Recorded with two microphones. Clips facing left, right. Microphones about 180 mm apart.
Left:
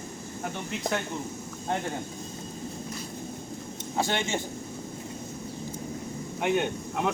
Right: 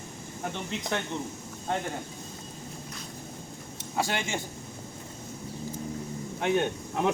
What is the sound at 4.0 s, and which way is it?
Speech, 25° left (ahead or behind).